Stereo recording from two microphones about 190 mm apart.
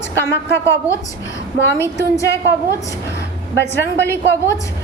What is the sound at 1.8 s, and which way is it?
Speech, 15° left (ahead or behind).